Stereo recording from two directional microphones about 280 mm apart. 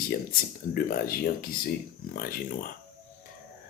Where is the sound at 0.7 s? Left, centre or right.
Left.